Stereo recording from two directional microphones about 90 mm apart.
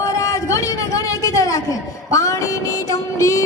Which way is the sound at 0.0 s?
40° left (ahead or behind).